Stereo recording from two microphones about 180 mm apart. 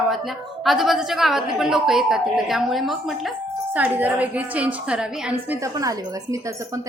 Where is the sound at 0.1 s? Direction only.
Centre (ahead or behind).